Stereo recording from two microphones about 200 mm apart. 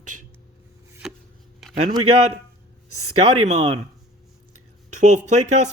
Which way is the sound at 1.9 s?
30° right (ahead or behind).